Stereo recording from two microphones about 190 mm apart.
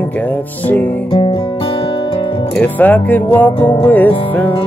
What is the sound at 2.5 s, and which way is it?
Speech, 10° left (ahead or behind).